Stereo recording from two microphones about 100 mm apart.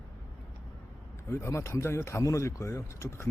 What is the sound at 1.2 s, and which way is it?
Speech, 25° left (ahead or behind).